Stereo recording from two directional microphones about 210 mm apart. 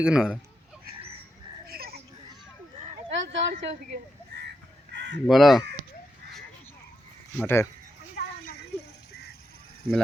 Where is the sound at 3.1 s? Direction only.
60° right (ahead or behind).